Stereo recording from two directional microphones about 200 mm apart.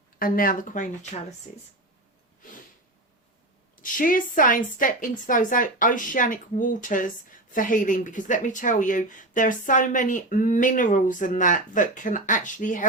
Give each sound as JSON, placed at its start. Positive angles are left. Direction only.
{"t": 0.2, "sound": "speech", "side_deg": 45}
{"t": 3.8, "sound": "a woman's voice", "side_deg": 40}